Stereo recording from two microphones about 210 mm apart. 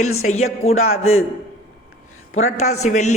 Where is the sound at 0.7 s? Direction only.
80° left.